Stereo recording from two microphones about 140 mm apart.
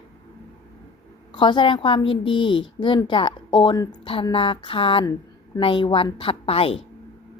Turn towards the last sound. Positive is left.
turn(degrees=45)  # may be behind; listen again after turning